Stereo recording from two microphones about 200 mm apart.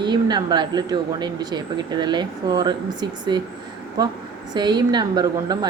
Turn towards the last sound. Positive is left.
turn(degrees=-20)  # may be behind; listen again after turning